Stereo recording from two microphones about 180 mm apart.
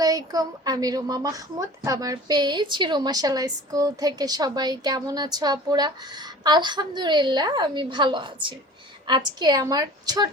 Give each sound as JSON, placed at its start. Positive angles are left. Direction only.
{"t": 0.0, "sound": "a woman's voice", "side_deg": -20}